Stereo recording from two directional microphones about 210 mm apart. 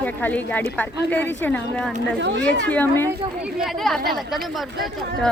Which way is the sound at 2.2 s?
60° right (ahead or behind).